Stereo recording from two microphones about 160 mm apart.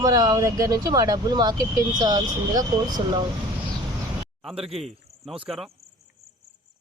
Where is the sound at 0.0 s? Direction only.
25° right (ahead or behind).